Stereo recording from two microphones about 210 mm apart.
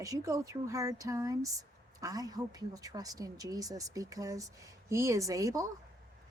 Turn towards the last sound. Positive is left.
turn(degrees=-15)  # may be behind; listen again after turning